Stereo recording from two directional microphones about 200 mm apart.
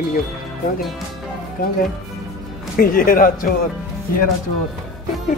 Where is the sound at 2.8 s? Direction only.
45° left (ahead or behind).